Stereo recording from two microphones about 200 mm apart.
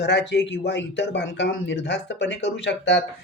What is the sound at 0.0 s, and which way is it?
Speech, 60° left (ahead or behind).